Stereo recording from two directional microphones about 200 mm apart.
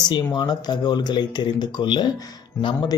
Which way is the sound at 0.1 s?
20° left (ahead or behind).